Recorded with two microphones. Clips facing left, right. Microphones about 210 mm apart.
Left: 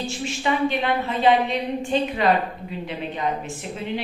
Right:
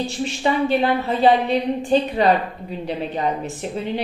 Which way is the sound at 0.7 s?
40° right (ahead or behind).